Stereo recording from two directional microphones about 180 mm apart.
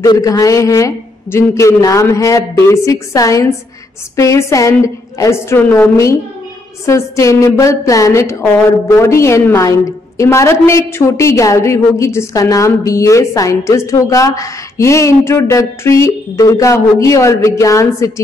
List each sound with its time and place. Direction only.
0.0 s a man's voice: 20° left (ahead or behind)